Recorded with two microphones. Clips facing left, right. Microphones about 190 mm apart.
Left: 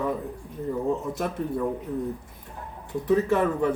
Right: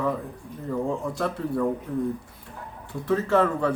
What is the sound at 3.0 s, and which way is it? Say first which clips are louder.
Speech: even; 20° left (ahead or behind).